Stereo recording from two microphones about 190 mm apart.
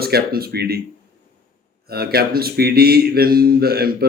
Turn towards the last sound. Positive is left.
turn(degrees=-55)  # may be behind; listen again after turning